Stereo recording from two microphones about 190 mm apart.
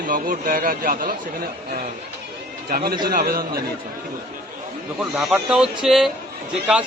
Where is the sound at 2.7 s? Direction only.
50° right (ahead or behind).